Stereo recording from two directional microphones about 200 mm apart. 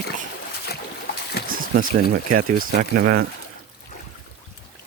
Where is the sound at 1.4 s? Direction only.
45° right (ahead or behind).